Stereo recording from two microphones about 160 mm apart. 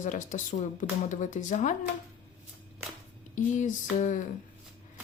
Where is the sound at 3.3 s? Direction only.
50° left (ahead or behind).